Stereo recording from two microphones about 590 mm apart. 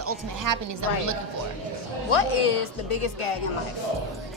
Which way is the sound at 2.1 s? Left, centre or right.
Left.